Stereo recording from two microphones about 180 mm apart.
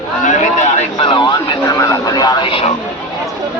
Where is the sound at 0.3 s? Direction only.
45° left (ahead or behind); by 1.4 s 25° left (ahead or behind).